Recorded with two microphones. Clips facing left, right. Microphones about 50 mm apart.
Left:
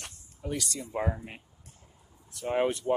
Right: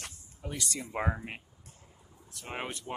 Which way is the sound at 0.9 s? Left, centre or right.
Right.